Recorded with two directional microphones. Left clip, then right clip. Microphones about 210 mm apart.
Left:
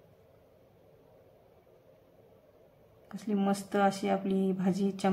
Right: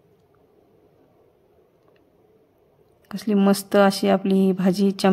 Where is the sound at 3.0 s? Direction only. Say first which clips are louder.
Right 11 dB; 40° right (ahead or behind).